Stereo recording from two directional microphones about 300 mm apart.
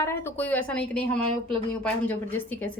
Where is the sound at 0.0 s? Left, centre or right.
Centre.